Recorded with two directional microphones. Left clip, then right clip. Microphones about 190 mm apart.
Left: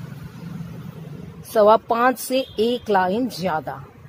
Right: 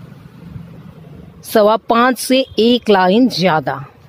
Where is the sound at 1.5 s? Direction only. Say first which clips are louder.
Right 4 dB; 50° right (ahead or behind).